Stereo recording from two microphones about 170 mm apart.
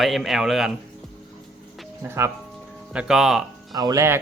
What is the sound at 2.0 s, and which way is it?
Speech, 15° right (ahead or behind).